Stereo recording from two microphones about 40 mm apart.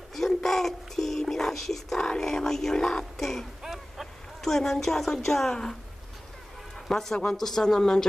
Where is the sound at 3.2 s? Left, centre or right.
Centre.